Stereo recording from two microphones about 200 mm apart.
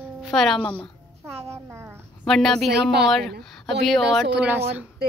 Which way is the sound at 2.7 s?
55° right (ahead or behind).